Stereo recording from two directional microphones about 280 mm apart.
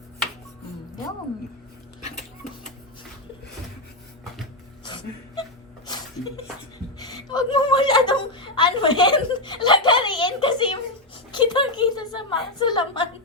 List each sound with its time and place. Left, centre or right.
4.8 s music: centre
7.0 s chuckle: centre
11.3 s a sound: centre